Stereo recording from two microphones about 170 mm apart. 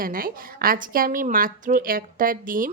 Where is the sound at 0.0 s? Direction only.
55° right (ahead or behind).